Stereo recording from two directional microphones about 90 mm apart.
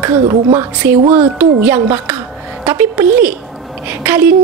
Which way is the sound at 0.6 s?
25° right (ahead or behind).